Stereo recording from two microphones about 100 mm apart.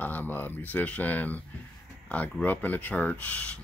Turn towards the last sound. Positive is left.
turn(degrees=15)  # may be behind; listen again after turning